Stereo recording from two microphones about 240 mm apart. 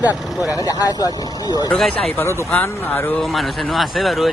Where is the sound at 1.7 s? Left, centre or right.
Centre.